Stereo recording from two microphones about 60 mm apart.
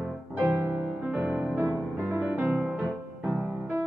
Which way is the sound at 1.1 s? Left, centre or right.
Centre.